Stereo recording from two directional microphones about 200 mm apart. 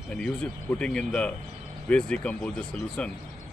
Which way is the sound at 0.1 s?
5° left (ahead or behind).